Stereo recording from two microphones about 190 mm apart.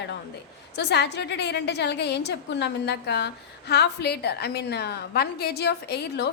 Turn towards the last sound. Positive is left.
turn(degrees=60)  # may be behind; listen again after turning